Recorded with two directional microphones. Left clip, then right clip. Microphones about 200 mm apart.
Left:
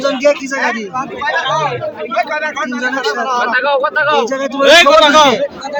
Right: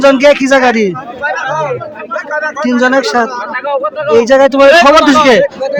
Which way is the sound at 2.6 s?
55° right (ahead or behind).